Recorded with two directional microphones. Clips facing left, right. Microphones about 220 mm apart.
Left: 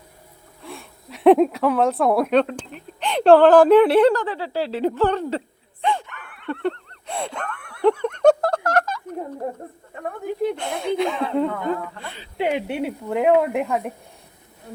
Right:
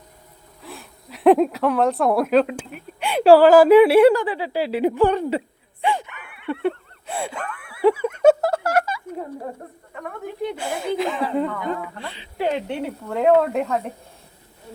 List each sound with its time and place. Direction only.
0.6 s speech: centre (ahead or behind)
5.8 s a sound: 10° right (ahead or behind)
10.4 s speech: 5° right (ahead or behind)
12.0 s speech: 45° left (ahead or behind)
12.4 s speech: 10° left (ahead or behind)